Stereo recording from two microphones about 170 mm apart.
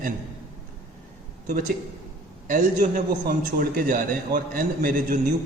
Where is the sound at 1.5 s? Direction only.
45° right (ahead or behind).